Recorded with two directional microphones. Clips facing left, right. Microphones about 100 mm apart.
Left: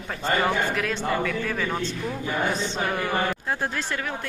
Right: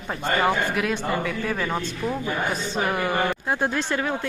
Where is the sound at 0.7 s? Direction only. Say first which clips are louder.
Right 1 dB; 15° right (ahead or behind).